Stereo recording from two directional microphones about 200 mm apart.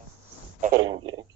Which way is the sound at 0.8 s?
75° right (ahead or behind).